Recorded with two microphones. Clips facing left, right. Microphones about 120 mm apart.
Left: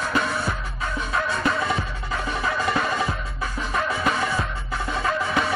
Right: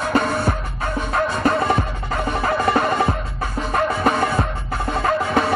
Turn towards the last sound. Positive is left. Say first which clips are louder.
# right 5 dB
turn(degrees=-50)  # may be behind; listen again after turning